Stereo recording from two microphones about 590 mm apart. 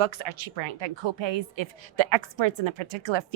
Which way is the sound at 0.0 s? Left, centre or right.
Right.